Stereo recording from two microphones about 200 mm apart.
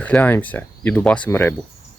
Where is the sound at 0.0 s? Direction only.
10° left (ahead or behind).